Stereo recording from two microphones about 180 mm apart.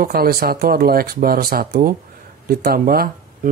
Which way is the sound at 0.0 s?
55° right (ahead or behind).